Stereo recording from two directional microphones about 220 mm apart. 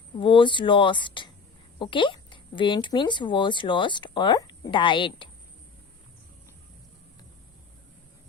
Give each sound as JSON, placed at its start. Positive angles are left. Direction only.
{"t": 0.2, "sound": "speech", "side_deg": 20}